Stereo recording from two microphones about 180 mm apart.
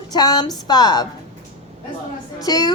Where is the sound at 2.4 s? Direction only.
20° left (ahead or behind).